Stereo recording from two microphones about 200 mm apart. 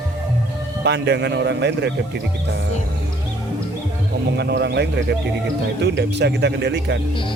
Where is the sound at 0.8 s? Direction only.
60° right (ahead or behind).